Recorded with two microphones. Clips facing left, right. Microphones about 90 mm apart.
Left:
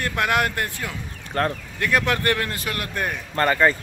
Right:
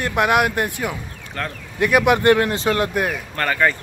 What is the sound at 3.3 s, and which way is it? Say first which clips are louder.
Speech: left 3 dB; 25° left (ahead or behind).